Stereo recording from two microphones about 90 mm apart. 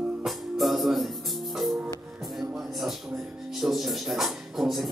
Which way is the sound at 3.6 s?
Centre (ahead or behind).